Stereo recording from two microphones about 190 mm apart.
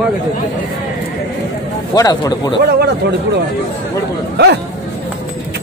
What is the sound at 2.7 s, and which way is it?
Speech, 60° right (ahead or behind).